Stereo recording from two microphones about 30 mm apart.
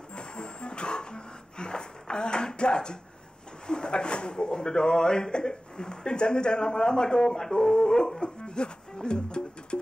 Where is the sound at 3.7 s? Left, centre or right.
Left.